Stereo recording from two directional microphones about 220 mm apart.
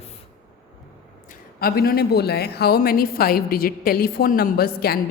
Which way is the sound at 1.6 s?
45° left (ahead or behind).